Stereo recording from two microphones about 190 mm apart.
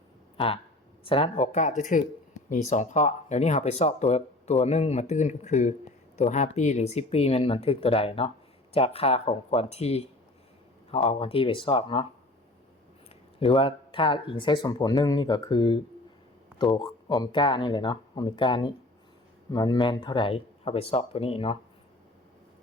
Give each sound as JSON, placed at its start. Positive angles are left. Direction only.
{"t": 0.3, "sound": "speech", "side_deg": 30}
{"t": 13.4, "sound": "speech", "side_deg": 30}